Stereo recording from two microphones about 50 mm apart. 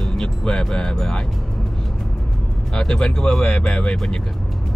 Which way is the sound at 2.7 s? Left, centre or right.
Centre.